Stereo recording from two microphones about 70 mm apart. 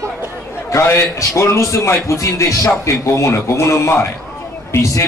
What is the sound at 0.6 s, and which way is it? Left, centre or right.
A man's voice, left.